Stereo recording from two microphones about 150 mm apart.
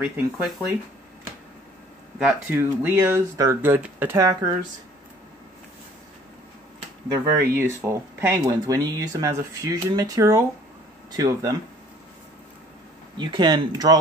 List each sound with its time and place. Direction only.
0.0 s speech: 5° right (ahead or behind)
2.5 s speech: 15° right (ahead or behind)
7.1 s speech: 20° right (ahead or behind)
13.2 s speech: 30° right (ahead or behind)